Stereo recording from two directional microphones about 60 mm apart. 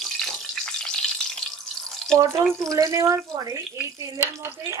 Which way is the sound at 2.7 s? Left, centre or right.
Right.